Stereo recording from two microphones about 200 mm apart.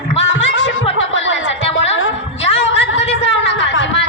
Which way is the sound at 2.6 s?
65° left (ahead or behind).